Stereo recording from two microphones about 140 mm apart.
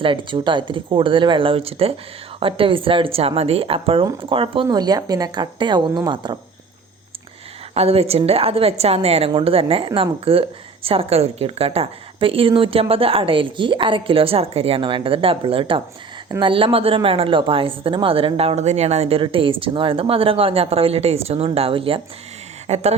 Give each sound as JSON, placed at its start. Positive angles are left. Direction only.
{"t": 0.0, "sound": "a woman's voice", "side_deg": -35}
{"t": 7.7, "sound": "a woman's voice", "side_deg": -45}
{"t": 22.6, "sound": "speech", "side_deg": -50}